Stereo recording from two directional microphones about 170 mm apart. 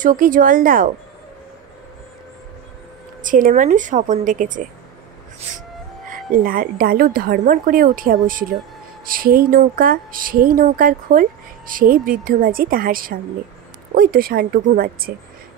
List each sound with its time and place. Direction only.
0.0 s a woman's voice: 50° right (ahead or behind)
3.3 s a woman's voice: 50° right (ahead or behind)
6.0 s a woman's voice: 55° right (ahead or behind)